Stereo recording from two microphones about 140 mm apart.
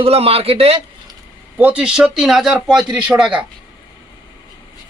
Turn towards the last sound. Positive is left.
turn(degrees=-5)  # may be behind; listen again after turning